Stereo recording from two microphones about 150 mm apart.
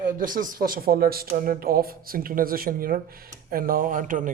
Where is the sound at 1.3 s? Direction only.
70° right (ahead or behind).